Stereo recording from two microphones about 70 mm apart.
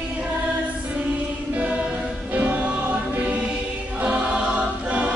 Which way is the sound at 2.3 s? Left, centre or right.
Right.